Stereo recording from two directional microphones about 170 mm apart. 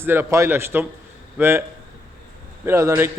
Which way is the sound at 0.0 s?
15° right (ahead or behind).